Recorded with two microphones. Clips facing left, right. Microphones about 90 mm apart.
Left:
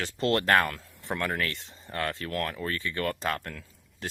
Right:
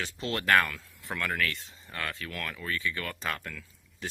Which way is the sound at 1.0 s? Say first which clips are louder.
Left 2 dB; 25° left (ahead or behind).